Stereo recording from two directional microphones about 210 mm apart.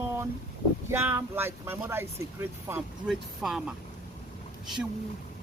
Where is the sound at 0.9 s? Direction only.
10° right (ahead or behind).